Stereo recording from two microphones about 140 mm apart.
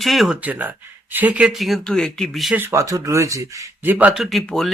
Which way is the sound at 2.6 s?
20° right (ahead or behind).